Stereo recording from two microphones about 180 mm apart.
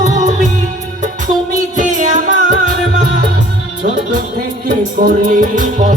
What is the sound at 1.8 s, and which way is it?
Music, 45° right (ahead or behind).